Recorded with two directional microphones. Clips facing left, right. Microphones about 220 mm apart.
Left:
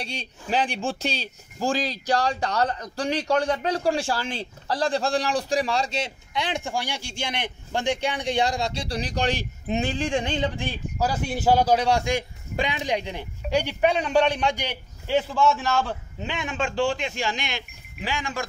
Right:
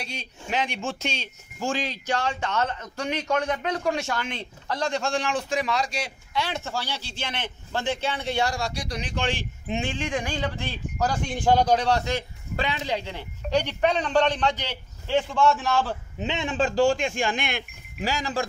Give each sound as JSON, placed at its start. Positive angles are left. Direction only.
{"t": 0.0, "sound": "a man's voice", "side_deg": 30}
{"t": 16.2, "sound": "speech", "side_deg": -25}
{"t": 18.1, "sound": "speech", "side_deg": -35}